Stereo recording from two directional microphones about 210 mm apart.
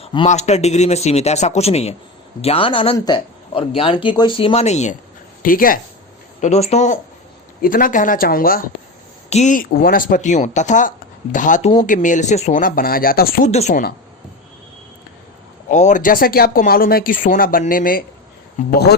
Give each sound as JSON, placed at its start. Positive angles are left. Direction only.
{"t": 0.0, "sound": "speech", "side_deg": 25}
{"t": 6.4, "sound": "speech", "side_deg": 30}
{"t": 13.5, "sound": "speech", "side_deg": 30}
{"t": 15.7, "sound": "speech", "side_deg": 35}